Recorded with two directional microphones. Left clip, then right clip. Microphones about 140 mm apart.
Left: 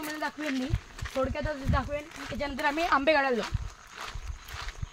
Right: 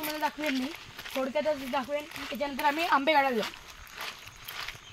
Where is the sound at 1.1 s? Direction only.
5° right (ahead or behind).